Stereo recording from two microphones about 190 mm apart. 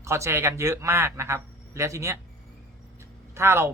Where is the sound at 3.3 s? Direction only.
15° right (ahead or behind).